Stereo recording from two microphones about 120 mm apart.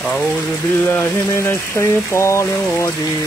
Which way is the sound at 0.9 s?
20° left (ahead or behind).